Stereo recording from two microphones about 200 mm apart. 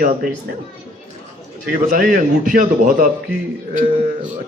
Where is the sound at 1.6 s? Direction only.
45° right (ahead or behind).